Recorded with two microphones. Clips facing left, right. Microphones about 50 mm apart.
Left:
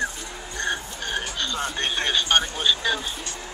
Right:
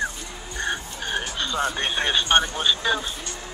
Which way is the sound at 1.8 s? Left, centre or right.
Centre.